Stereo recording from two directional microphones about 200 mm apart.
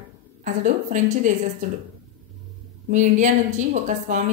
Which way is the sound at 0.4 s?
40° right (ahead or behind).